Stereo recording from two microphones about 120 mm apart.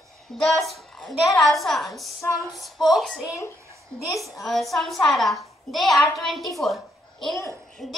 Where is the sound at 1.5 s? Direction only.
Centre (ahead or behind).